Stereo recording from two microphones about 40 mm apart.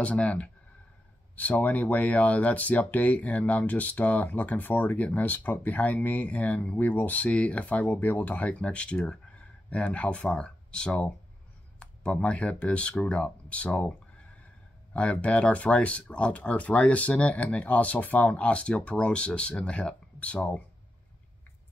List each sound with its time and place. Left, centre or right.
0.0 s speech: left
1.7 s speech: left
7.2 s speech: left
8.5 s speech: left
15.0 s speech: left
20.2 s speech: left